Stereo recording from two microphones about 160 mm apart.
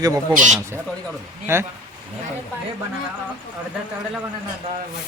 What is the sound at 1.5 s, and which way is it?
Speech, 15° right (ahead or behind).